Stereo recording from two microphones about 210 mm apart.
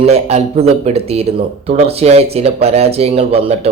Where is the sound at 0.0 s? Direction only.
30° right (ahead or behind).